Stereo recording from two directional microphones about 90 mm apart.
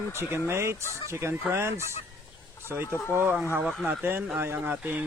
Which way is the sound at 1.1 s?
30° right (ahead or behind).